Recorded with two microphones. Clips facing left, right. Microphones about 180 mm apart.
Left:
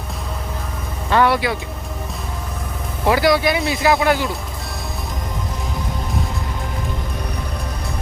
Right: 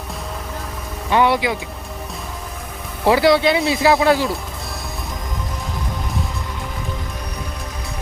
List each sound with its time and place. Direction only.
1.1 s speech: 15° right (ahead or behind)
3.1 s speech: 25° right (ahead or behind)